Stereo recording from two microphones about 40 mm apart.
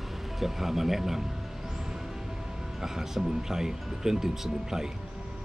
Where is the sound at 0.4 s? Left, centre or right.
Centre.